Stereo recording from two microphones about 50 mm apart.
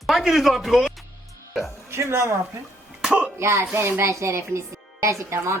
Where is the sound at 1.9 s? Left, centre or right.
Right.